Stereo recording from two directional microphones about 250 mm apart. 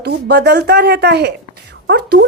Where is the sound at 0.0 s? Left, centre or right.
Right.